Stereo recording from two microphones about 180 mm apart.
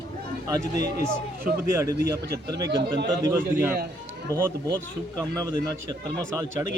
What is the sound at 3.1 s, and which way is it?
Speech, 15° right (ahead or behind).